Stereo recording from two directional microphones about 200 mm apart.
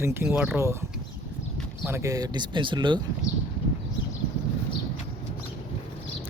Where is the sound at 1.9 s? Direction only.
15° right (ahead or behind).